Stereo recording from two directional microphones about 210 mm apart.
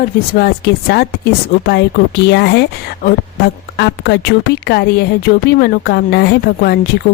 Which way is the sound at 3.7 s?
55° left (ahead or behind).